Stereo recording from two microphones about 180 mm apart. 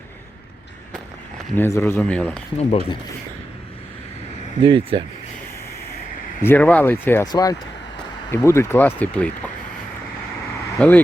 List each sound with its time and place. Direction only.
1.5 s speech: 15° left (ahead or behind)
2.6 s speech: 35° left (ahead or behind)
4.6 s speech: 25° right (ahead or behind)
6.4 s speech: 10° left (ahead or behind)
10.8 s speech: 10° left (ahead or behind)